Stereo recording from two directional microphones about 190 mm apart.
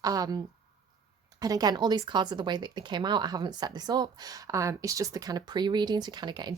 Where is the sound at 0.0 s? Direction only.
20° right (ahead or behind).